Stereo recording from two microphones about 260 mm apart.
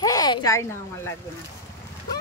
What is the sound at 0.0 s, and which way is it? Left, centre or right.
Speech, centre.